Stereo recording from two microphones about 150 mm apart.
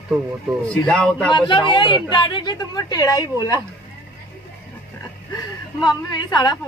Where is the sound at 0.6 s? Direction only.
5° left (ahead or behind).